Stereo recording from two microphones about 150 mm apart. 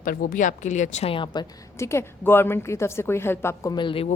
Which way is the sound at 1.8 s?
20° left (ahead or behind).